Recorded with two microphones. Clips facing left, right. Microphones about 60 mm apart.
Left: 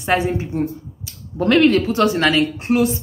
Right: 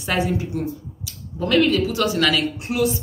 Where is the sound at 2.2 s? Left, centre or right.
Left.